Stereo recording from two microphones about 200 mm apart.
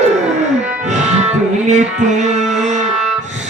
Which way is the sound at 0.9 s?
35° right (ahead or behind).